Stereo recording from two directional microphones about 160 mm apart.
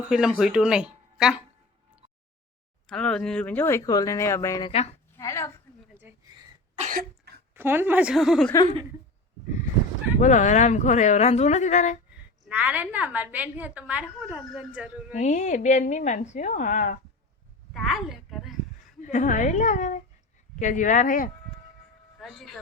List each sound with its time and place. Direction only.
0.1 s speech: 5° right (ahead or behind)
2.8 s speech: 5° left (ahead or behind)
5.9 s a sound: 15° right (ahead or behind)
6.7 s cough: 50° right (ahead or behind)
7.5 s a woman's voice: 15° right (ahead or behind)
10.2 s a woman's voice: 50° left (ahead or behind)
12.5 s a woman's voice: 10° right (ahead or behind)
15.1 s a woman's voice: 50° left (ahead or behind)
17.7 s a child's voice: centre (ahead or behind)
19.0 s a woman's voice: 50° left (ahead or behind)
22.2 s speech: centre (ahead or behind)